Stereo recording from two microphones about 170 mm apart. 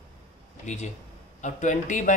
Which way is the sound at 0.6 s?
45° left (ahead or behind).